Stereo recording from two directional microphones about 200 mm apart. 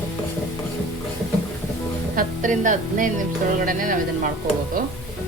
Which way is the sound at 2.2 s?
40° right (ahead or behind).